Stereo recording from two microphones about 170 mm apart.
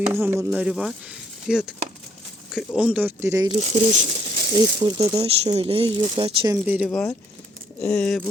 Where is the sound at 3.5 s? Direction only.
40° right (ahead or behind).